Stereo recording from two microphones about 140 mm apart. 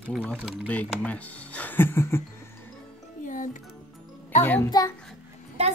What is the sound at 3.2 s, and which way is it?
Music, 65° left (ahead or behind).